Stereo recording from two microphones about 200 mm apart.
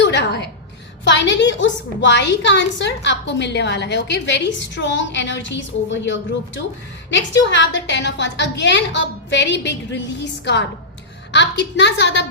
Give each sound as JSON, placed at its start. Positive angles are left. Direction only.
{"t": 0.0, "sound": "a woman's voice", "side_deg": 60}
{"t": 11.3, "sound": "a woman's voice", "side_deg": 60}